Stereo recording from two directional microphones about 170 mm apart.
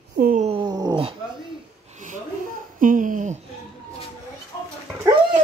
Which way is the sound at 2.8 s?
50° right (ahead or behind).